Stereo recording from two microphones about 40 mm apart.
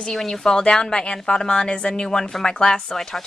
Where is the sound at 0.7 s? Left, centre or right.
Left.